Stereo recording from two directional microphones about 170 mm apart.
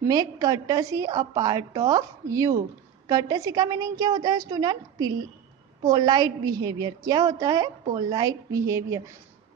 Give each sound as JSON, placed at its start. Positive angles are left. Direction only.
{"t": 0.0, "sound": "a woman's voice", "side_deg": -20}